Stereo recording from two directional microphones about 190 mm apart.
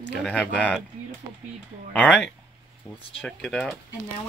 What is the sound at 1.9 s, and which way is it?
Speech, 5° left (ahead or behind).